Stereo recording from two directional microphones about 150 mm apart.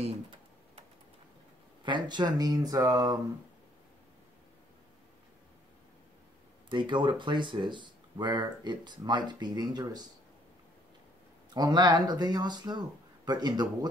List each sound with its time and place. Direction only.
0.0 s typing: 40° right (ahead or behind)
1.9 s speech: 30° right (ahead or behind)
6.7 s speech: 30° right (ahead or behind)
11.5 s speech: 30° right (ahead or behind)